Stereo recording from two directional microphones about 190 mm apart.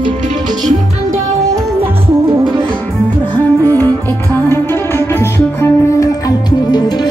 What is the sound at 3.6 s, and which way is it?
Music, 10° left (ahead or behind).